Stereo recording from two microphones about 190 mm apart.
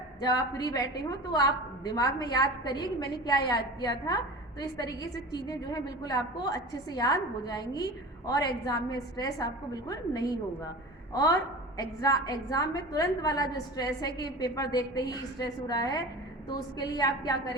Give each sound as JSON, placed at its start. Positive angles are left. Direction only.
{"t": 0.2, "sound": "a woman's voice", "side_deg": 20}